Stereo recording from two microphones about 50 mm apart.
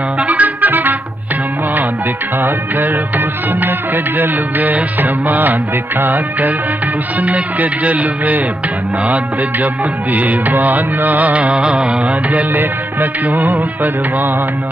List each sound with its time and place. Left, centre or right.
0.2 s music: right
3.6 s music: right
12.3 s music: right